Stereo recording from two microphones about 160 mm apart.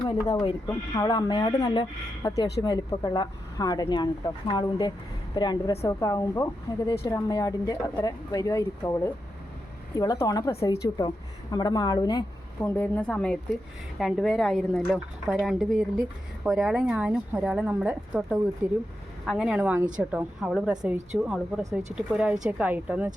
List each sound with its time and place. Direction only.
0.3 s speech: 25° left (ahead or behind)
12.6 s a woman's voice: 10° left (ahead or behind); by 18.8 s 15° right (ahead or behind)
19.2 s a woman's voice: 5° right (ahead or behind)